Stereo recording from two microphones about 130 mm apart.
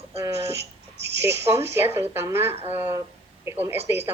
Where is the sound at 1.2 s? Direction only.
20° right (ahead or behind).